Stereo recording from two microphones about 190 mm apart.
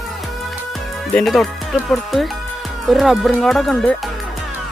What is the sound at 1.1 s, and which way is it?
Speech, centre (ahead or behind).